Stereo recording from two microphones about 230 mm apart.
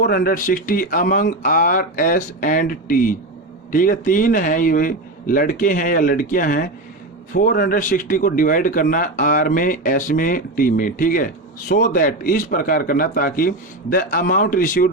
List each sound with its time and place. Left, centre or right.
0.0 s speech: left